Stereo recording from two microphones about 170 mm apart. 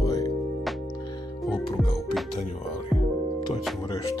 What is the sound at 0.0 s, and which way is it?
Music, 20° left (ahead or behind).